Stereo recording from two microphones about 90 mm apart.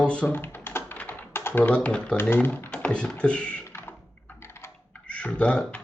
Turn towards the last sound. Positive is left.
turn(degrees=15)  # may be behind; listen again after turning